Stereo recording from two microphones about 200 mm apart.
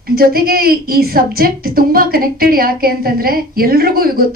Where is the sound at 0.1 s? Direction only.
50° right (ahead or behind).